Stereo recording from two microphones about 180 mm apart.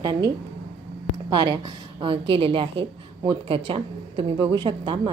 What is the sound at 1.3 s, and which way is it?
A woman's voice, 25° right (ahead or behind).